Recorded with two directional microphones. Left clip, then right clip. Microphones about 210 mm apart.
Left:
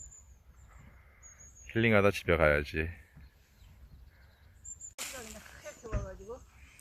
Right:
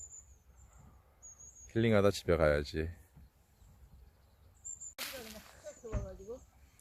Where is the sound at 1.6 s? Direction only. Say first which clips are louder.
Left 3 dB; 5° right (ahead or behind).